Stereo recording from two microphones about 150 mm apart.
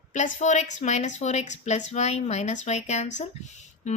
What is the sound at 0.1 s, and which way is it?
A woman's voice, 55° left (ahead or behind).